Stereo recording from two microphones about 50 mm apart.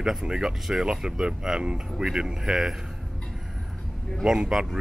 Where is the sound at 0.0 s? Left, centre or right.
Centre.